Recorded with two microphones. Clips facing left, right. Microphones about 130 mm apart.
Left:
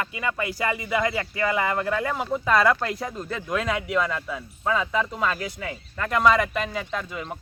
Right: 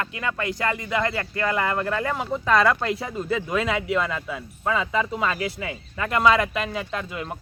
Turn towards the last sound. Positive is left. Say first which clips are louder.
# right 1 dB
turn(degrees=0)  # may be behind; listen again after turning